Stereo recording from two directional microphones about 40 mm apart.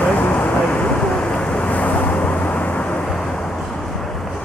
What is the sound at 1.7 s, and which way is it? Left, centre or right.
Vehicle, left.